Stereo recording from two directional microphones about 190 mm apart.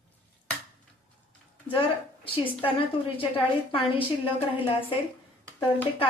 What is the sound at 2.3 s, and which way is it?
A woman's voice, 30° left (ahead or behind).